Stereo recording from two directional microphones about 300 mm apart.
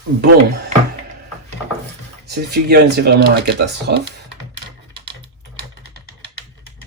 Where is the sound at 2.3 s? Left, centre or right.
Right.